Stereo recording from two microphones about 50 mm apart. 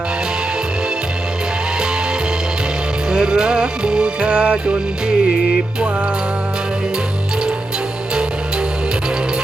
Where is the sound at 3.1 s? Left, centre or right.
Centre.